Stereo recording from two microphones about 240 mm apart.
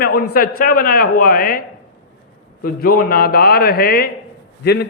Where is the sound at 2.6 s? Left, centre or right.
Left.